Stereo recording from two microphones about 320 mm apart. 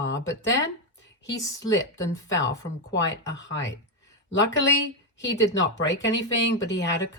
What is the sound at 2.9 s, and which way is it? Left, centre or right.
Speech, left.